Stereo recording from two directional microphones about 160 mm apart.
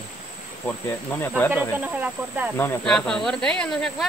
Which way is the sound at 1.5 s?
10° right (ahead or behind).